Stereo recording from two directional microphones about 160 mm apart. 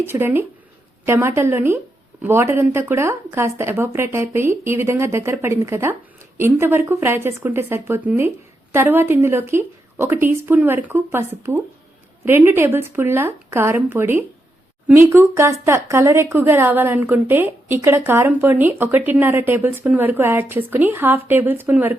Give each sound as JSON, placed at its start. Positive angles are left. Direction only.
{"t": 0.0, "sound": "speech", "side_deg": -15}